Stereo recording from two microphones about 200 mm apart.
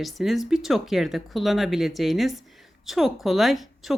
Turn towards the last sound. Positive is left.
turn(degrees=0)  # may be behind; listen again after turning